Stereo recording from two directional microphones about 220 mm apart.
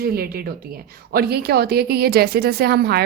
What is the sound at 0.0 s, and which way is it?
A woman's voice, 45° right (ahead or behind).